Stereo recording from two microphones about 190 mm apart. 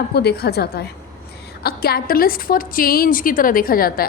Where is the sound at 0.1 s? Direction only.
60° left (ahead or behind).